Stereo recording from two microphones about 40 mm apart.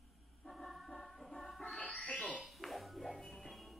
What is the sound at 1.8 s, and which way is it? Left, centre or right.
Music, left.